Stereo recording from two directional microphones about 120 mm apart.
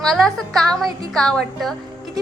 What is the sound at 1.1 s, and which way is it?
Speech, 5° left (ahead or behind).